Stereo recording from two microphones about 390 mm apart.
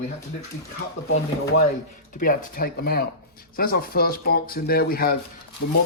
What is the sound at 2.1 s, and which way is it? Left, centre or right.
Speech, left.